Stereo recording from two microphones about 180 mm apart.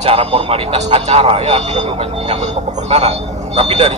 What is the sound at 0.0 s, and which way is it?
Speech, 35° right (ahead or behind).